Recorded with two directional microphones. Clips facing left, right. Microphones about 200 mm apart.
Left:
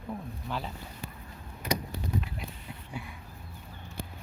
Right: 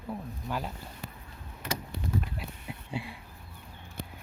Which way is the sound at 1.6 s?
15° left (ahead or behind).